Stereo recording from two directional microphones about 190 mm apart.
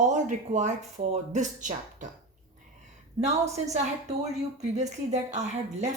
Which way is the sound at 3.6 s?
35° right (ahead or behind).